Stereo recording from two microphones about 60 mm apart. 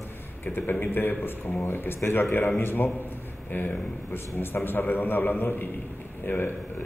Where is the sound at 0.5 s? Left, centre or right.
Left.